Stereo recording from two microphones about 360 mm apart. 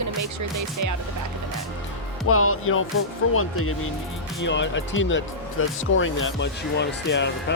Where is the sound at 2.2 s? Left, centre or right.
Left.